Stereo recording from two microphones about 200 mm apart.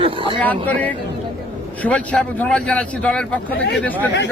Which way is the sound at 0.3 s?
5° left (ahead or behind).